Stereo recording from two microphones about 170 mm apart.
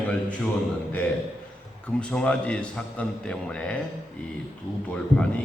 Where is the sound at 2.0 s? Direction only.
5° left (ahead or behind).